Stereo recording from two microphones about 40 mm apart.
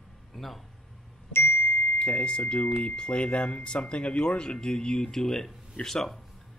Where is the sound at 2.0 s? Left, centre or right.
Left.